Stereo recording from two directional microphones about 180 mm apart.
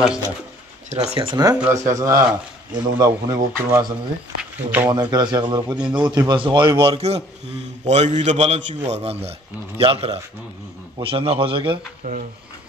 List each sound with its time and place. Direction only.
0.8 s a man's voice: 35° right (ahead or behind); by 3.8 s 20° right (ahead or behind)
4.4 s a sound: 10° right (ahead or behind)
4.8 s a man's voice: 25° right (ahead or behind)
12.0 s speech: 55° right (ahead or behind)